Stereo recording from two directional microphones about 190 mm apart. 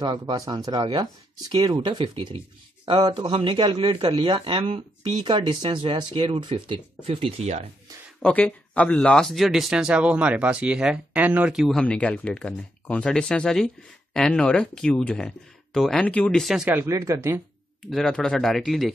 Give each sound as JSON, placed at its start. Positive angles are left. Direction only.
{"t": 0.0, "sound": "speech", "side_deg": -25}
{"t": 8.2, "sound": "speech", "side_deg": 5}
{"t": 17.8, "sound": "speech", "side_deg": 0}